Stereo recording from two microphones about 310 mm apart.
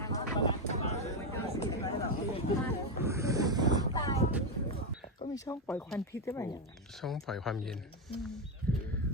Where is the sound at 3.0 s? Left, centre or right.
Centre.